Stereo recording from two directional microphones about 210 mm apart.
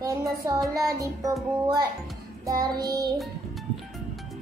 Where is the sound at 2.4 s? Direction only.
15° right (ahead or behind).